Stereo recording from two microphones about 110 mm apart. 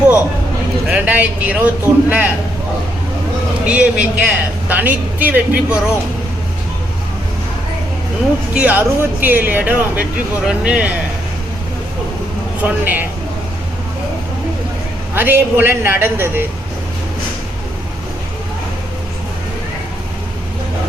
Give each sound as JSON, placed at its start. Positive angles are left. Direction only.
{"t": 0.9, "sound": "speech", "side_deg": -10}
{"t": 3.7, "sound": "speech", "side_deg": -10}
{"t": 8.5, "sound": "speech", "side_deg": -15}
{"t": 12.6, "sound": "speech", "side_deg": -15}
{"t": 15.1, "sound": "a woman's voice", "side_deg": -20}